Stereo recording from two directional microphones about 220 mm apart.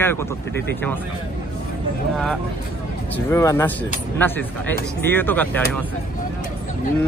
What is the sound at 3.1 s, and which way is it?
Speech, 15° left (ahead or behind).